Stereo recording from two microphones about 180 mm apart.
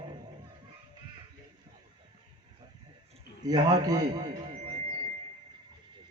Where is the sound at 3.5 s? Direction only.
20° right (ahead or behind).